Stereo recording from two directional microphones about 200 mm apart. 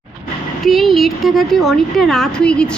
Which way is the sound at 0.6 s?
Centre (ahead or behind).